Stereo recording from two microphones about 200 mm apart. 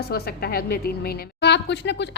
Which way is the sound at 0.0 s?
50° left (ahead or behind).